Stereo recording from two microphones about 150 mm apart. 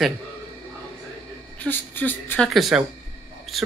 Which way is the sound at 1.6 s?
15° left (ahead or behind).